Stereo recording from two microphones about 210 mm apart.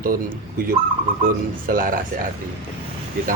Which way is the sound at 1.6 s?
40° right (ahead or behind).